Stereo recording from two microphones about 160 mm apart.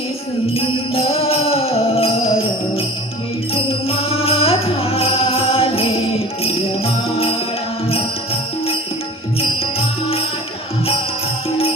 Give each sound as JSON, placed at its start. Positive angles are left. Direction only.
{"t": 0.5, "sound": "music", "side_deg": 40}